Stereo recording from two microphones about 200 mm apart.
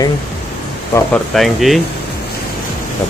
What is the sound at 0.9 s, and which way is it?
Speech, 5° left (ahead or behind).